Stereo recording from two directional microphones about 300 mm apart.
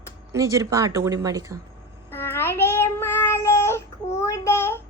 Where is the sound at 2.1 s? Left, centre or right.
Centre.